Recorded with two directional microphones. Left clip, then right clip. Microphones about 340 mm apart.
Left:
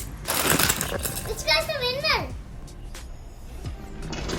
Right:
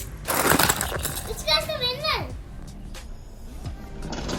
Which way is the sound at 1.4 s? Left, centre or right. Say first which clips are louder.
Even; centre.